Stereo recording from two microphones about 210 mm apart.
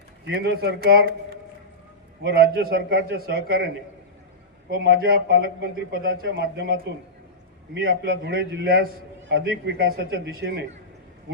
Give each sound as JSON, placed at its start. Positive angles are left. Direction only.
{"t": 0.3, "sound": "a man's voice", "side_deg": -50}
{"t": 2.3, "sound": "a man's voice", "side_deg": -45}
{"t": 4.8, "sound": "a man's voice", "side_deg": -50}